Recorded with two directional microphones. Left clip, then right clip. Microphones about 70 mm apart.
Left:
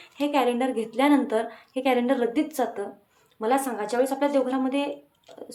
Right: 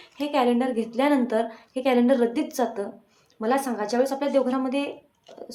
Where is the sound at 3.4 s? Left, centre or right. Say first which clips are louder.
Even; centre.